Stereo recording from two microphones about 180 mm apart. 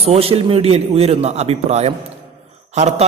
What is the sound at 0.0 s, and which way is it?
A man's voice, 35° right (ahead or behind).